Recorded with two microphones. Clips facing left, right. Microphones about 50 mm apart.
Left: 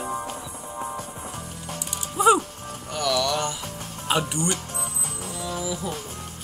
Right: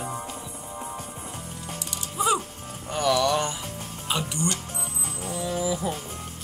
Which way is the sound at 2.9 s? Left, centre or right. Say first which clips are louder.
Right 2 dB; right.